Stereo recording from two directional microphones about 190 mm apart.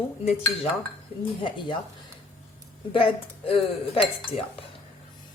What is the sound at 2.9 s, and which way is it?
Speech, 30° left (ahead or behind).